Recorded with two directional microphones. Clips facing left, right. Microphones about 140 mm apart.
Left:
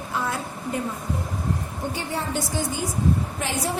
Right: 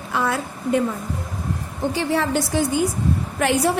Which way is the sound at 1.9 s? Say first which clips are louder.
Right 8 dB; 80° right.